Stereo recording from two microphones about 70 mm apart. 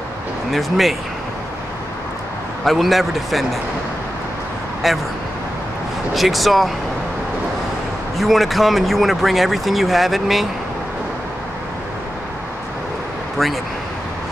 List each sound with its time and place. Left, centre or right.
0.5 s speech: centre
2.6 s speech: centre
4.8 s speech: centre
6.1 s speech: centre
8.2 s speech: centre
13.4 s speech: centre